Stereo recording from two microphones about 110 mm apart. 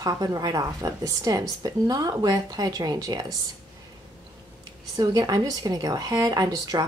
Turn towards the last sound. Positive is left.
turn(degrees=-35)  # may be behind; listen again after turning